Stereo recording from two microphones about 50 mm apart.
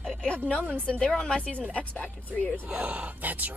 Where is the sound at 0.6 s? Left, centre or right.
Right.